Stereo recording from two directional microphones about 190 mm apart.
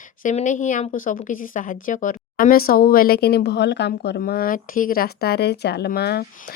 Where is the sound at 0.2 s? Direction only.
40° left (ahead or behind).